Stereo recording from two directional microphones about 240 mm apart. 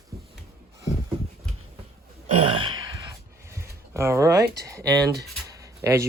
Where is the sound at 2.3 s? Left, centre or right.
Right.